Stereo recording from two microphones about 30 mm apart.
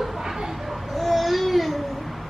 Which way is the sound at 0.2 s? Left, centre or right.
Centre.